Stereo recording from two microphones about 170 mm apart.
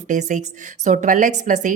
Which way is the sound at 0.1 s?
45° right (ahead or behind).